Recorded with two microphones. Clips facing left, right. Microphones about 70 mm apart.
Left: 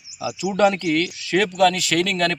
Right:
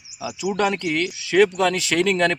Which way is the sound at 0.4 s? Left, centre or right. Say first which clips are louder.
Left 4 dB; centre.